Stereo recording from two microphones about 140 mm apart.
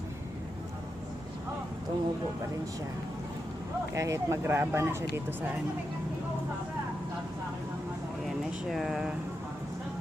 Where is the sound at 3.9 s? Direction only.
20° right (ahead or behind).